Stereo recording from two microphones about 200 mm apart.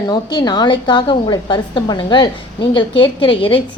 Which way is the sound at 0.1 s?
20° left (ahead or behind).